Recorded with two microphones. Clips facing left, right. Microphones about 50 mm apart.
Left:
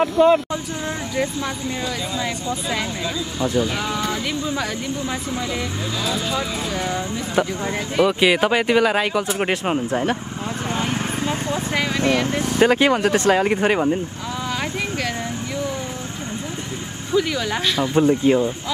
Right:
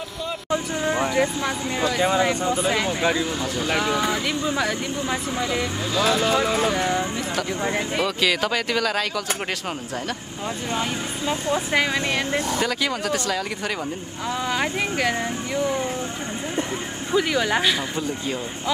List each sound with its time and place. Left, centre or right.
0.0 s speech: left
0.5 s speech: centre
2.0 s speech: right
3.7 s speech: centre
6.7 s speech: centre
8.2 s speech: left
11.5 s speech: centre
12.5 s speech: left
14.6 s speech: centre
17.1 s speech: centre
17.9 s speech: left